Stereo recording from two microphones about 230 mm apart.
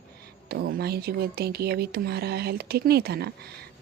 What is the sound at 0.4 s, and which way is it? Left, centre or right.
Speech, right.